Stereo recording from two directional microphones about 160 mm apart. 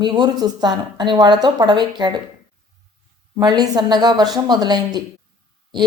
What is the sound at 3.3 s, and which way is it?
A woman's voice, 25° right (ahead or behind).